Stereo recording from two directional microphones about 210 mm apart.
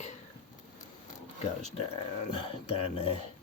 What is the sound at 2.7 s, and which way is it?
Speech, 30° left (ahead or behind).